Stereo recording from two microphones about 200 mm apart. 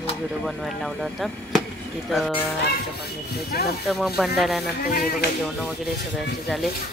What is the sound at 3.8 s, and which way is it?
Speech, centre (ahead or behind).